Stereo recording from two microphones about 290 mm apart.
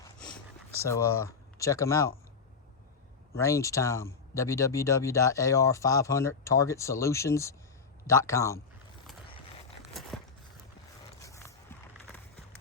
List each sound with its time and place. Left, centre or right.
0.9 s speech: centre
3.3 s speech: centre
11.2 s biting: centre